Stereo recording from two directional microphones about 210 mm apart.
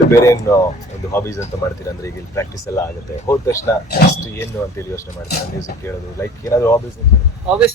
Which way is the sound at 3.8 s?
50° left (ahead or behind).